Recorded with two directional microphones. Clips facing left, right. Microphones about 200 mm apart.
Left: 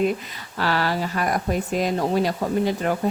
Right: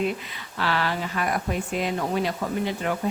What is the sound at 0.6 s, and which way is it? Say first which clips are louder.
Speech: left 3 dB; 40° left (ahead or behind).